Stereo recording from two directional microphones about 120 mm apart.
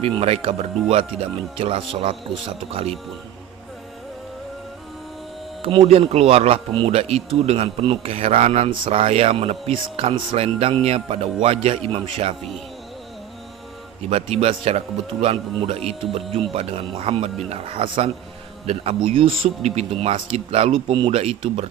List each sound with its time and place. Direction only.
0.0 s a man's voice: 55° right (ahead or behind)
5.6 s a man's voice: 45° right (ahead or behind)
14.1 s a man's voice: 50° right (ahead or behind)
19.0 s a man's voice: 50° right (ahead or behind)